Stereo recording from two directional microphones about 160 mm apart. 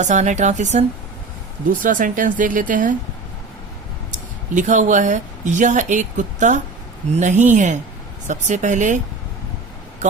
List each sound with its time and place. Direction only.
0.0 s speech: 50° right (ahead or behind)
4.1 s a woman's voice: 50° right (ahead or behind)